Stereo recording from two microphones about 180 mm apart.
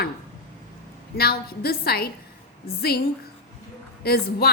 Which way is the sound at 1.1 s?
60° left (ahead or behind).